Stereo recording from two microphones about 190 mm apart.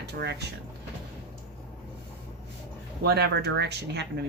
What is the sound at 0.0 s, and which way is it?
Speech, 60° right (ahead or behind).